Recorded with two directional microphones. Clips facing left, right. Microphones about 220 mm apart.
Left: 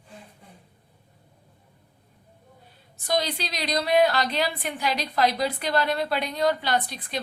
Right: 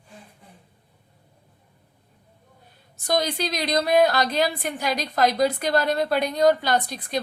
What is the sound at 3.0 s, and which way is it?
A woman's voice, 45° right (ahead or behind).